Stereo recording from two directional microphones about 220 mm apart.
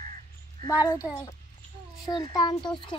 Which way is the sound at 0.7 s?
15° left (ahead or behind).